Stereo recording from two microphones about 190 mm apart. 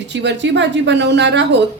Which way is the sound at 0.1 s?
65° right (ahead or behind).